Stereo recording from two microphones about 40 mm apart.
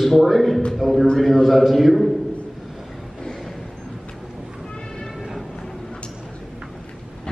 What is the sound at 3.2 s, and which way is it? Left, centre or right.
Vehicle, centre.